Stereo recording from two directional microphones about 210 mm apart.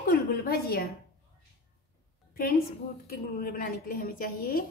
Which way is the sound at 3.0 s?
45° left (ahead or behind).